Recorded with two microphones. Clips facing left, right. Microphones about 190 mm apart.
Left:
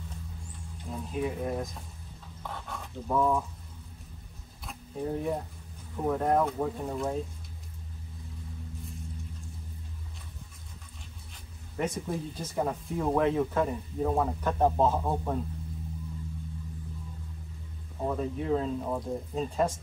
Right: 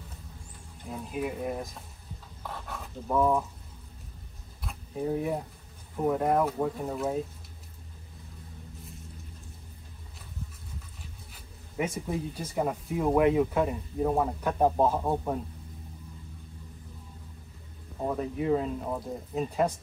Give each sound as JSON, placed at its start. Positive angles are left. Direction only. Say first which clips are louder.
{"t": 0.8, "sound": "speech", "louder": "left 1 dB", "side_deg": -5}
{"t": 2.4, "sound": "a sound", "louder": "even", "side_deg": -5}
{"t": 4.6, "sound": "a sound", "louder": "right 2 dB", "side_deg": -5}
{"t": 6.0, "sound": "speech", "louder": "right 1 dB", "side_deg": -5}
{"t": 11.3, "sound": "speech", "louder": "right 2 dB", "side_deg": -5}
{"t": 18.0, "sound": "speech", "louder": "right 2 dB", "side_deg": -5}